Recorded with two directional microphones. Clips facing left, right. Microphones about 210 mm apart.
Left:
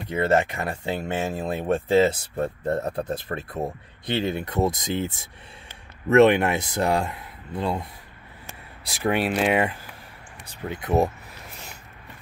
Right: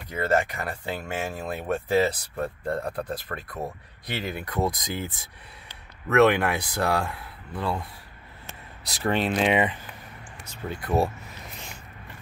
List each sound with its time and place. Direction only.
0.1 s speech: 25° left (ahead or behind)
8.8 s speech: 10° left (ahead or behind)
10.7 s speech: 20° left (ahead or behind)